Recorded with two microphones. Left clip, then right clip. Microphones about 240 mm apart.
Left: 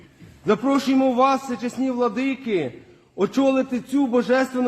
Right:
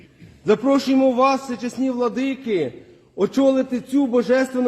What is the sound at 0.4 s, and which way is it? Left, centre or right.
A man's voice, centre.